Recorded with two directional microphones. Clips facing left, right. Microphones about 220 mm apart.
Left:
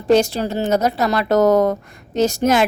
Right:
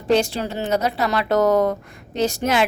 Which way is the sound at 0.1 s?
40° left (ahead or behind).